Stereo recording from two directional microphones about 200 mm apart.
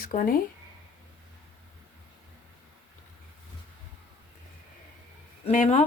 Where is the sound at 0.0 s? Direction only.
45° left (ahead or behind).